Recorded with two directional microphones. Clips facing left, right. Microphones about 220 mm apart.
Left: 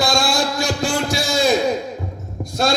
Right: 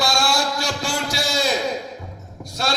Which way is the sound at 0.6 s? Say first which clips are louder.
Left 5 dB; 50° left (ahead or behind).